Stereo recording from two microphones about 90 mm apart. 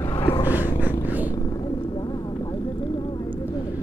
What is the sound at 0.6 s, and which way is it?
Purr, 20° right (ahead or behind).